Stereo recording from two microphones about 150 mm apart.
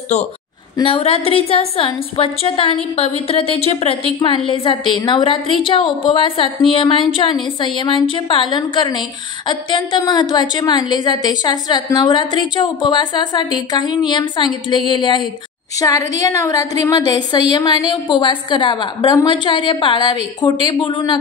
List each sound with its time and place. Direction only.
0.7 s a woman's voice: 40° left (ahead or behind)